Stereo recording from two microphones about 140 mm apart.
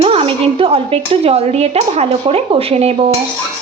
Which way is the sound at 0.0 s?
45° right (ahead or behind).